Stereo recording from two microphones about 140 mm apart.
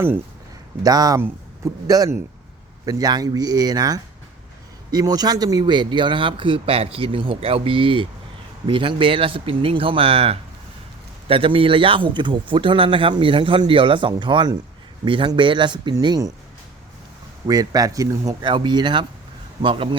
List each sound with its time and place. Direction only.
0.8 s speech: 25° right (ahead or behind)
17.4 s speech: 25° right (ahead or behind)